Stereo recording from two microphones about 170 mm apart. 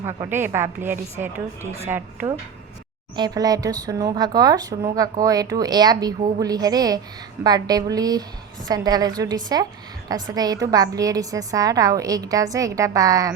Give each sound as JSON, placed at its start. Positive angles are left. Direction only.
{"t": 0.0, "sound": "a woman's voice", "side_deg": -15}